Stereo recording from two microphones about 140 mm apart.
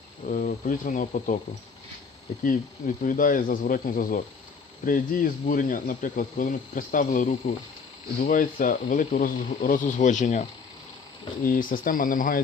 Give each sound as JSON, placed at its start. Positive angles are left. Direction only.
{"t": 0.3, "sound": "speech", "side_deg": 75}
{"t": 2.4, "sound": "speech", "side_deg": 70}
{"t": 11.4, "sound": "speech", "side_deg": 80}